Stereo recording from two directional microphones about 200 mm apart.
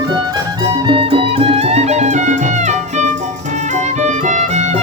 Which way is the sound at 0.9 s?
30° right (ahead or behind).